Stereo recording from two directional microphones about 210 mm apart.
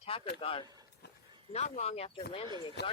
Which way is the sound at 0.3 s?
25° left (ahead or behind).